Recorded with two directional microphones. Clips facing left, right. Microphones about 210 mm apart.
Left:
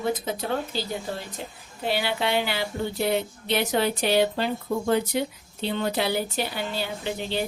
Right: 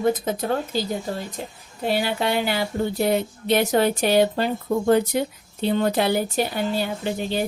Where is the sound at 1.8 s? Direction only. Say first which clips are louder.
Right 3 dB; 45° right (ahead or behind).